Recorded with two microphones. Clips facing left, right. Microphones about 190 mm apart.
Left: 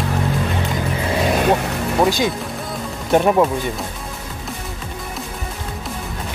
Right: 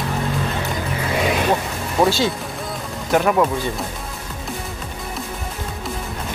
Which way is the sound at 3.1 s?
30° left (ahead or behind).